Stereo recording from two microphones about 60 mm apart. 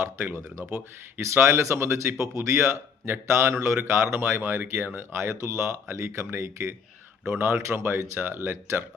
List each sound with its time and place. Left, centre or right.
0.6 s speech: right